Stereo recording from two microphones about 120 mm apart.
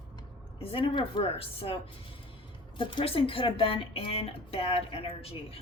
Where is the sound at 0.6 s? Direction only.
50° left (ahead or behind).